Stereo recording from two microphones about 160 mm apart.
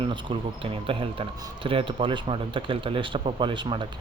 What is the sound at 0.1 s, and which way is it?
Speech, 35° right (ahead or behind).